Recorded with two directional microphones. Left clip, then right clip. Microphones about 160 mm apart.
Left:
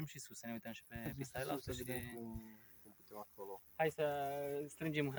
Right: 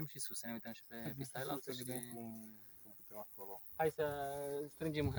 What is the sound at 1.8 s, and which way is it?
Speech, 25° right (ahead or behind).